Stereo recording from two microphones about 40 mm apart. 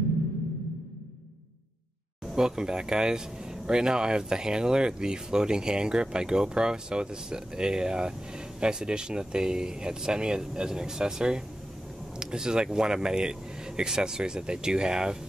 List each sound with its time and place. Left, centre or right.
2.3 s speech: centre